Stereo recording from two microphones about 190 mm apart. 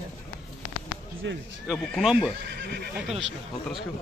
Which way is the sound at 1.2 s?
70° right (ahead or behind).